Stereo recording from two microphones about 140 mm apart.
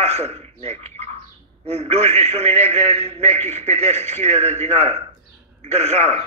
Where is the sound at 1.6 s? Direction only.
50° right (ahead or behind).